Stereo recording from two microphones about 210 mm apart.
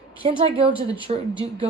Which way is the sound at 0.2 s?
30° right (ahead or behind).